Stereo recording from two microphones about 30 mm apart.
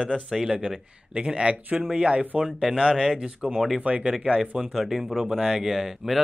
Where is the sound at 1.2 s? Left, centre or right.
Right.